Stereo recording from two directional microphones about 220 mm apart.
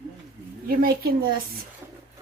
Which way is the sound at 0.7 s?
40° right (ahead or behind).